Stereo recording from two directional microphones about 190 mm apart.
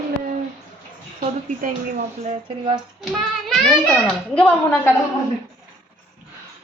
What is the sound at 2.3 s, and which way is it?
Speech, 25° right (ahead or behind).